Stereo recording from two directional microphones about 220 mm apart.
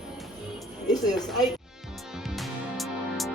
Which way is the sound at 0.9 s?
20° left (ahead or behind).